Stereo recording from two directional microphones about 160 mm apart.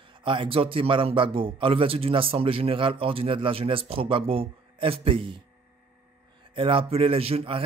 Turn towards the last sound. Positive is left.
turn(degrees=-35)  # may be behind; listen again after turning